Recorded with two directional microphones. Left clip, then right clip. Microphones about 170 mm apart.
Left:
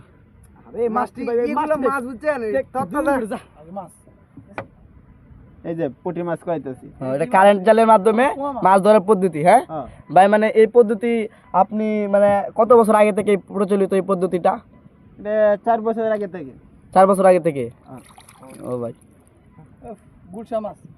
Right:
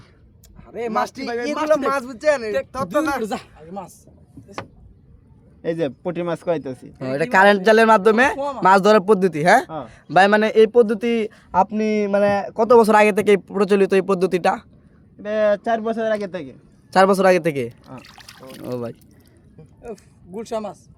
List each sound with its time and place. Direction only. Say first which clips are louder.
0.9 s speech: even; 35° right (ahead or behind)
3.2 s speech: right 2 dB; 65° right (ahead or behind)
5.6 s speech: right 2 dB; 65° right (ahead or behind)
7.0 s speech: left 1 dB; 15° right (ahead or behind)
8.4 s speech: even; 70° right (ahead or behind)
8.6 s speech: even; 20° right (ahead or behind); by 16.4 s 40° right (ahead or behind)
16.9 s speech: left 2 dB; 30° right (ahead or behind)
19.8 s speech: right 2 dB; 55° right (ahead or behind)